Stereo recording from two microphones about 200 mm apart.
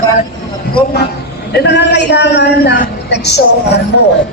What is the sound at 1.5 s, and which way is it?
A woman's voice, 55° left (ahead or behind).